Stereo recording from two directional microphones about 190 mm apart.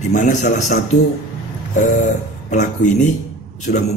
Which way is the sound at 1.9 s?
40° left (ahead or behind).